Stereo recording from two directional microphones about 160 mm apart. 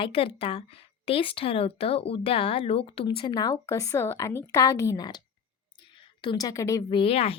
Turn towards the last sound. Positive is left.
turn(degrees=35)  # may be behind; listen again after turning